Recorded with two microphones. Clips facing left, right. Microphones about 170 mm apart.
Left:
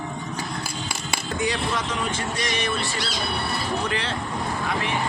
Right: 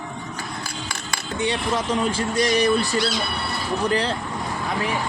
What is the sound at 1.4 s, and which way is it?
Speech, 30° right (ahead or behind).